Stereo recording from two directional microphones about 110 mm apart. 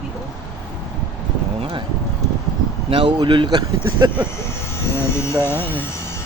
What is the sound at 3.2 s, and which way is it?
Speech, 45° right (ahead or behind).